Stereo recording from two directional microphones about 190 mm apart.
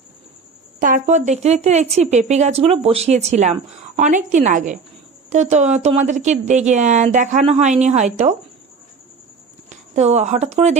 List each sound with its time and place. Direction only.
0.8 s speech: 45° right (ahead or behind)
9.6 s speech: 35° right (ahead or behind)